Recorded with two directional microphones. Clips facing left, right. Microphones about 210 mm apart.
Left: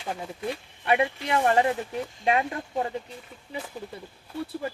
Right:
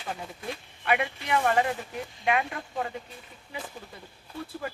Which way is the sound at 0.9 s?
25° left (ahead or behind).